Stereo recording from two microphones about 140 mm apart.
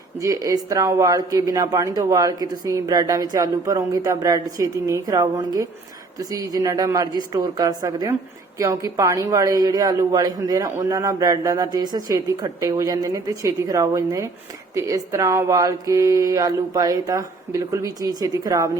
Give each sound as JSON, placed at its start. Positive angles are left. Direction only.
{"t": 0.2, "sound": "speech", "side_deg": -25}